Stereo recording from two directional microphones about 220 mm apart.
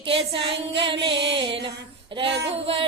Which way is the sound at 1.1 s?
55° right (ahead or behind).